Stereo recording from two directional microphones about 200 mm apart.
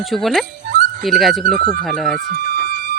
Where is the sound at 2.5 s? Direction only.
50° right (ahead or behind).